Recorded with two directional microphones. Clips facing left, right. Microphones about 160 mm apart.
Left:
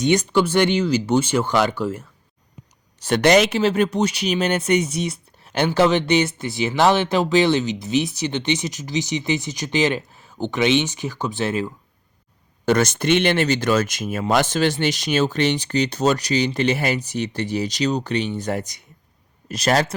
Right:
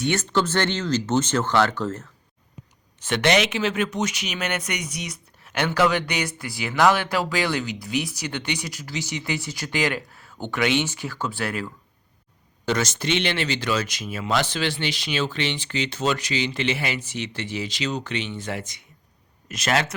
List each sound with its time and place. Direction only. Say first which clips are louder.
0.0 s speech: left 5 dB; 15° left (ahead or behind)
3.0 s speech: left 5 dB; 40° left (ahead or behind); by 11.7 s 20° left (ahead or behind)
12.6 s speech: left 6 dB; 55° left (ahead or behind); by 20.0 s 35° left (ahead or behind)